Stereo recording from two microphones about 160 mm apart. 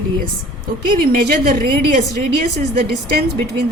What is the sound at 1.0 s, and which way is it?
A woman's voice, 70° right (ahead or behind).